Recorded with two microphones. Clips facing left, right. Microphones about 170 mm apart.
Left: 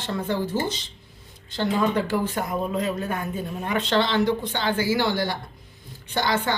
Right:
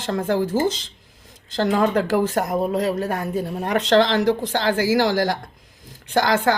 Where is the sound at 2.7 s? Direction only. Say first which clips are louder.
Right 4 dB; 70° right (ahead or behind).